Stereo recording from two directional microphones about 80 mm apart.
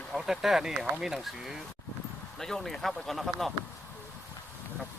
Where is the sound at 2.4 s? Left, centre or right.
Centre.